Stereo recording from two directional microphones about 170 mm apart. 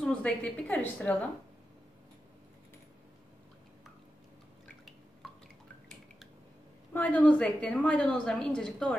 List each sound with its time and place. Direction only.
0.0 s a woman's voice: 5° left (ahead or behind)
6.9 s a woman's voice: 10° left (ahead or behind)